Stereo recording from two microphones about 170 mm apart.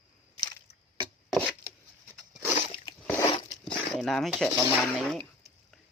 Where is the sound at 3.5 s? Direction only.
5° left (ahead or behind).